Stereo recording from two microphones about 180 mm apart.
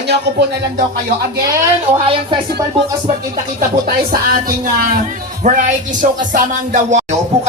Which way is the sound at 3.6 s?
50° right (ahead or behind).